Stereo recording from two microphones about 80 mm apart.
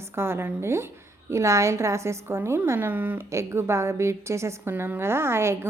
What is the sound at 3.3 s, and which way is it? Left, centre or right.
A woman's voice, right.